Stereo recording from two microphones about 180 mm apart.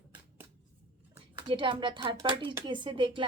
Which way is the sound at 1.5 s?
25° right (ahead or behind).